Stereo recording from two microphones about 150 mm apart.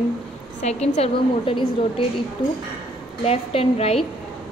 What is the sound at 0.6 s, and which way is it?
A woman's voice, 50° left (ahead or behind).